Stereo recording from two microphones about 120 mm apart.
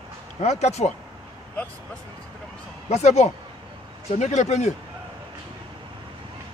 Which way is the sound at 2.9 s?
65° left (ahead or behind).